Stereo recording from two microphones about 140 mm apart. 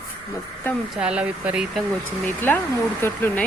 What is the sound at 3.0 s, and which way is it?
Speech, 15° left (ahead or behind).